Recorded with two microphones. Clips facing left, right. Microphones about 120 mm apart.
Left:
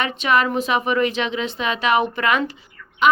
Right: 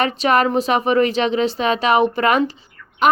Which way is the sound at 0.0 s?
40° right (ahead or behind).